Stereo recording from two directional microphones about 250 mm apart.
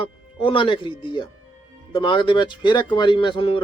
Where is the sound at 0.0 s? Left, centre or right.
Centre.